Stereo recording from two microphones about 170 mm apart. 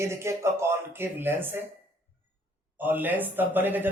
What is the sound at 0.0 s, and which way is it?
A man's voice, 15° right (ahead or behind).